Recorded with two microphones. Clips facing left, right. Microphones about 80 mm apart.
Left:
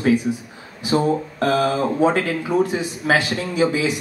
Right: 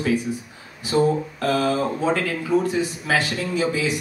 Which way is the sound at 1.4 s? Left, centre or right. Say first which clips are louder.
Left 2 dB; left.